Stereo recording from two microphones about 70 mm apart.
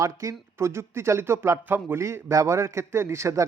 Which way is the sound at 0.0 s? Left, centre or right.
Right.